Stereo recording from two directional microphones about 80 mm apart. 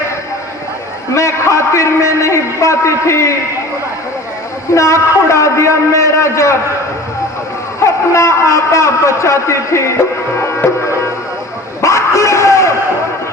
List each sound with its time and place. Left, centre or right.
1.1 s a man's voice: left
4.7 s a man's voice: left
7.9 s a man's voice: left
11.8 s a sound: left